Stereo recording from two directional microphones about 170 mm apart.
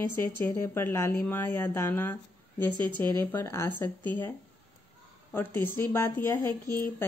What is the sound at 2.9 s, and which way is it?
Speech, 25° right (ahead or behind).